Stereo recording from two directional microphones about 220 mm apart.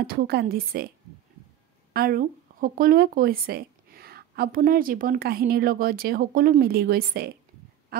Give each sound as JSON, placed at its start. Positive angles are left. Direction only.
{"t": 0.0, "sound": "speech", "side_deg": -40}
{"t": 2.0, "sound": "speech", "side_deg": -40}
{"t": 7.9, "sound": "a sound", "side_deg": -45}